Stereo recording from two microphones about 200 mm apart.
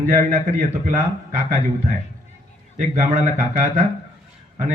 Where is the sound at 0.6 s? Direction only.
40° right (ahead or behind).